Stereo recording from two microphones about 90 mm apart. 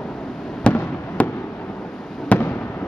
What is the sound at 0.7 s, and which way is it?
Fireworks, 20° left (ahead or behind).